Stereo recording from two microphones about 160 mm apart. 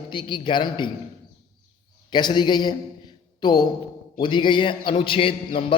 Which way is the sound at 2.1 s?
25° left (ahead or behind).